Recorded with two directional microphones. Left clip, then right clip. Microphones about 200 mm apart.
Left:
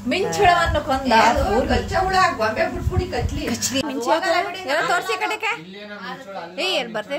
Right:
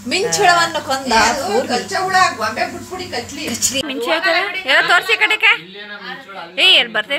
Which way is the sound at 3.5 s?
20° right (ahead or behind).